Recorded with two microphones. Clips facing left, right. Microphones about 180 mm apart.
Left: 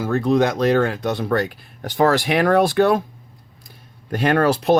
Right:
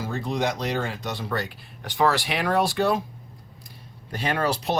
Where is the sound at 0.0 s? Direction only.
55° left (ahead or behind).